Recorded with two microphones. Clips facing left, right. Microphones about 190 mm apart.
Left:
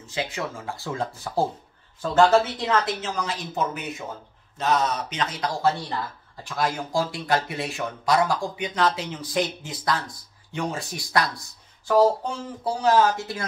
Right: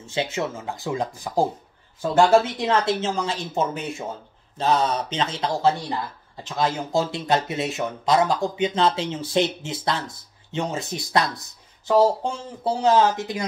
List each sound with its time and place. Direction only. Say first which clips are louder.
0.0 s a man's voice: right 4 dB; 25° right (ahead or behind)
2.7 s a man's voice: right 4 dB; 25° right (ahead or behind)